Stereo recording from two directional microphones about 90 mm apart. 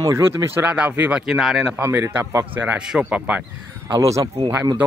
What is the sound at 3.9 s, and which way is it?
Speech, 35° right (ahead or behind).